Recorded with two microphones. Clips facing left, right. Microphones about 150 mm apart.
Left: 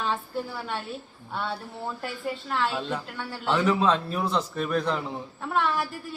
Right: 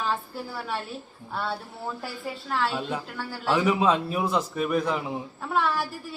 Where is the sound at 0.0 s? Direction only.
Centre (ahead or behind).